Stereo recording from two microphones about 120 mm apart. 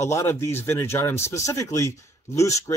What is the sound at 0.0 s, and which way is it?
Speech, 25° left (ahead or behind).